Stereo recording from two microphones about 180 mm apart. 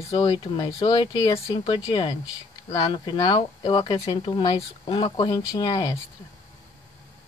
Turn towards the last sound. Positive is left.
turn(degrees=25)  # may be behind; listen again after turning